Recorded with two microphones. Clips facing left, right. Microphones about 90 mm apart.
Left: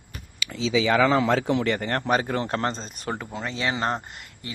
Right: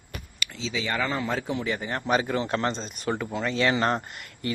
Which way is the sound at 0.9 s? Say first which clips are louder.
Left 7 dB; 90° left.